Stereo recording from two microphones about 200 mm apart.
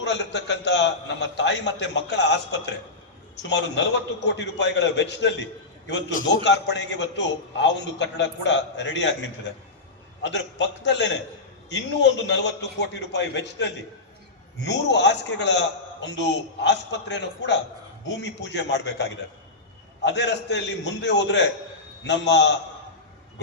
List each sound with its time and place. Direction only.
0.0 s a man's voice: 60° left (ahead or behind)